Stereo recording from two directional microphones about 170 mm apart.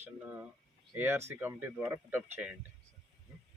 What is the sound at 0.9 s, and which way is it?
Speech, 15° right (ahead or behind).